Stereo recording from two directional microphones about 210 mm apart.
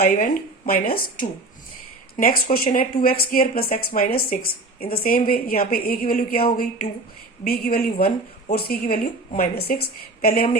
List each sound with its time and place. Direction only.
0.0 s speech: 45° left (ahead or behind)
2.1 s speech: 45° left (ahead or behind)